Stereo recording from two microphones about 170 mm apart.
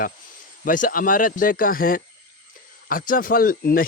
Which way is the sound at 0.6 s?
55° left (ahead or behind).